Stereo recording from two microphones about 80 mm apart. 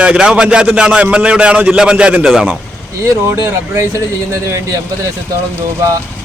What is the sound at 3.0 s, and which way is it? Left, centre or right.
Speech, right.